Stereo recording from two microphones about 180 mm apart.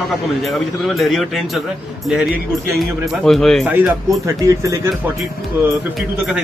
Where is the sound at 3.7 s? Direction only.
10° right (ahead or behind).